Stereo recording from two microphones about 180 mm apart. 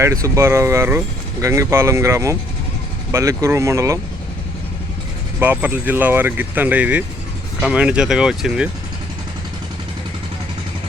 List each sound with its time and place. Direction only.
0.0 s speech: 15° right (ahead or behind)
5.4 s speech: 10° right (ahead or behind)